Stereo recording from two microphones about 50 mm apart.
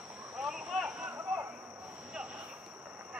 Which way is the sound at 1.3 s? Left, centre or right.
Centre.